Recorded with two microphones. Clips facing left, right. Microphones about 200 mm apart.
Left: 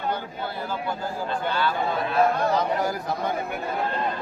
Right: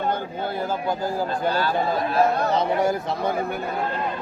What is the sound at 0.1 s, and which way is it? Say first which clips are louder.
Speech: right 4 dB; 45° right (ahead or behind).